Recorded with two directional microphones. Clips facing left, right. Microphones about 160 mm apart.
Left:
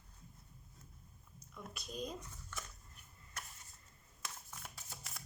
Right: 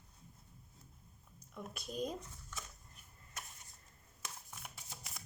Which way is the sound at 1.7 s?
50° right (ahead or behind).